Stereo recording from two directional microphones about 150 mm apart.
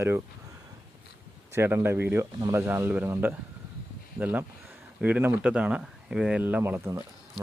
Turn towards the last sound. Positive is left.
turn(degrees=-15)  # may be behind; listen again after turning